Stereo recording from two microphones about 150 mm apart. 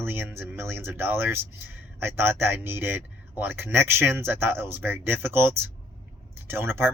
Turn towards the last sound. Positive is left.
turn(degrees=-15)  # may be behind; listen again after turning